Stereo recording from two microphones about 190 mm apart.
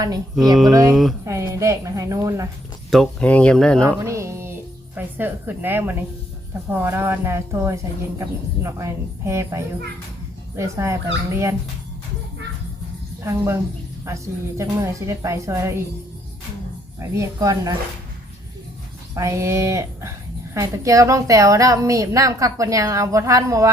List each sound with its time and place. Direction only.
0.7 s a woman's voice: 15° right (ahead or behind)
2.9 s speech: 5° left (ahead or behind)
3.8 s music: 15° right (ahead or behind)
4.9 s a woman's voice: 10° right (ahead or behind)
13.2 s a woman's voice: 15° right (ahead or behind)
14.6 s a woman's voice: 15° right (ahead or behind)
17.0 s speech: 15° right (ahead or behind)
19.1 s a woman's voice: 15° right (ahead or behind)